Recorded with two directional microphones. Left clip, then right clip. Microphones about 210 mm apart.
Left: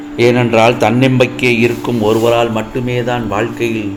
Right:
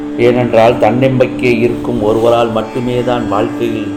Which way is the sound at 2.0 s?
25° left (ahead or behind).